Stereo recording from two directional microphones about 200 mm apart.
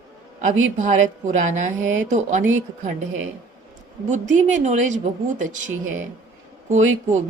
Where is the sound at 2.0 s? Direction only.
35° right (ahead or behind).